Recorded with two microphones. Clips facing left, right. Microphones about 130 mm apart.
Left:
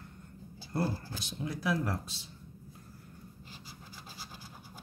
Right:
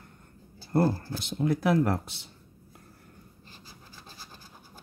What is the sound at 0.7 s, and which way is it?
Speech, 50° right (ahead or behind).